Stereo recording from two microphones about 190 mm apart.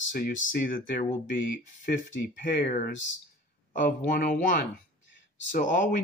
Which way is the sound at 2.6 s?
45° left (ahead or behind).